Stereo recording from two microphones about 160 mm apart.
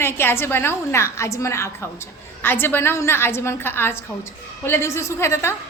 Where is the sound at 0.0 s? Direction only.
15° left (ahead or behind).